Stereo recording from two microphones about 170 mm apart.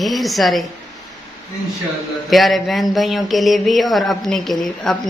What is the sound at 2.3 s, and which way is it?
Speech, centre (ahead or behind).